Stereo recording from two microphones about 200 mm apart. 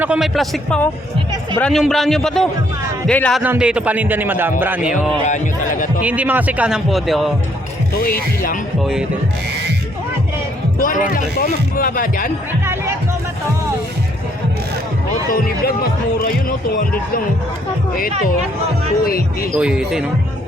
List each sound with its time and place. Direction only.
0.0 s a man's voice: 5° right (ahead or behind)
3.4 s a man's voice: 5° right (ahead or behind)
7.9 s speech: 45° left (ahead or behind)
8.8 s a man's voice: centre (ahead or behind)
10.8 s music: 45° left (ahead or behind)
11.1 s speech: 40° left (ahead or behind)
15.3 s speech: 45° left (ahead or behind)
19.0 s speech: 45° left (ahead or behind)
19.5 s a man's voice: 5° right (ahead or behind)